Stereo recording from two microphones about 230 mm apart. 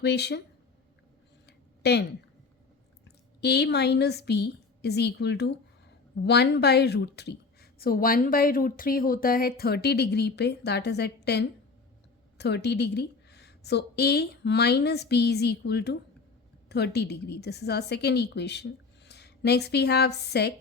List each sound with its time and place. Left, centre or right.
0.0 s a woman's voice: left
1.5 s a sound: left
3.4 s a woman's voice: left